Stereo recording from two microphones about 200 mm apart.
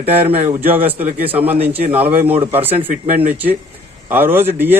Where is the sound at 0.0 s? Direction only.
30° right (ahead or behind).